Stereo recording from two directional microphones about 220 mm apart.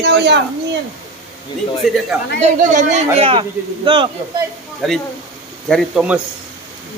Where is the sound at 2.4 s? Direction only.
35° right (ahead or behind).